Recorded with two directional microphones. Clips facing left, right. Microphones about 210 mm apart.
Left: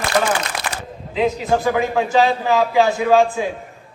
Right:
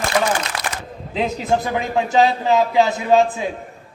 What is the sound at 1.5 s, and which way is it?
A man's voice, 20° right (ahead or behind).